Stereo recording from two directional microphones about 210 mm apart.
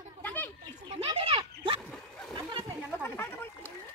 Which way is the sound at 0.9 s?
30° right (ahead or behind).